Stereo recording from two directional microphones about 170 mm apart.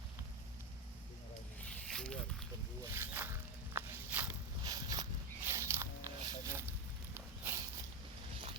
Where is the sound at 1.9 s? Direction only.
5° left (ahead or behind).